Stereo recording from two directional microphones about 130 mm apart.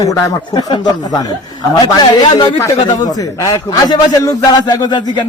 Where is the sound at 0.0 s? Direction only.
25° left (ahead or behind).